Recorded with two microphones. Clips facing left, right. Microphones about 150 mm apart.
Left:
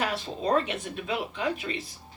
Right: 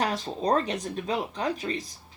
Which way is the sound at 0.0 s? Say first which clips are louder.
Right 2 dB; 40° right (ahead or behind).